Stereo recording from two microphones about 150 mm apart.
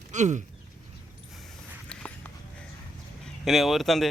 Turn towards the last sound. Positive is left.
turn(degrees=0)  # may be behind; listen again after turning